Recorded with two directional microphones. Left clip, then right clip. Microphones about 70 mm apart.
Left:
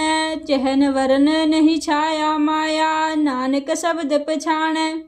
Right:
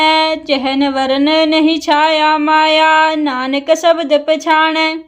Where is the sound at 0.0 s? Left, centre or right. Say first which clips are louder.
Right 9 dB; left.